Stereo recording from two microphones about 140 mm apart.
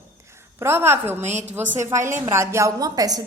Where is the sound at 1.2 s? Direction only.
55° right (ahead or behind).